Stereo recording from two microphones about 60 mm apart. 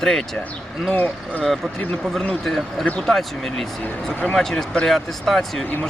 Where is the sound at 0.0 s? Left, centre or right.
Centre.